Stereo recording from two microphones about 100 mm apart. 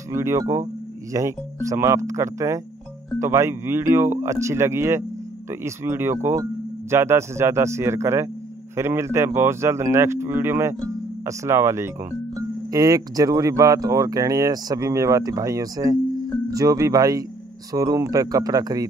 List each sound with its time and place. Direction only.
0.1 s speech: 30° right (ahead or behind)